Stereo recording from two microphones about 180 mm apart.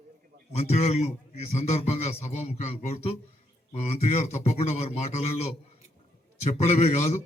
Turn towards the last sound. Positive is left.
turn(degrees=35)  # may be behind; listen again after turning